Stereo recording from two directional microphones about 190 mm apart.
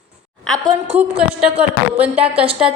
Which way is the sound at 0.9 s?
10° right (ahead or behind).